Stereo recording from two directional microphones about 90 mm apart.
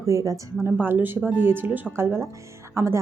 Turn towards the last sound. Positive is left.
turn(degrees=-30)  # may be behind; listen again after turning